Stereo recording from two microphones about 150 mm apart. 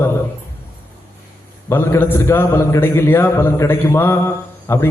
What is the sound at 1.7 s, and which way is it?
A man's voice, 15° left (ahead or behind).